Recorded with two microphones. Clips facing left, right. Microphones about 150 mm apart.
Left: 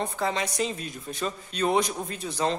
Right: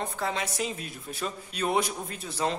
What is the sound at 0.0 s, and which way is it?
A man's voice, centre (ahead or behind).